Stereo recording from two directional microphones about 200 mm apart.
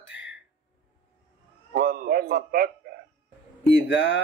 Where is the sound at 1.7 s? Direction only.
50° right (ahead or behind).